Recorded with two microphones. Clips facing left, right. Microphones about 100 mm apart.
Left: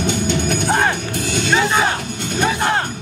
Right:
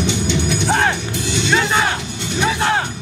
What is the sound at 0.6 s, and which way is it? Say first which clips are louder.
Music: even; 5° left (ahead or behind).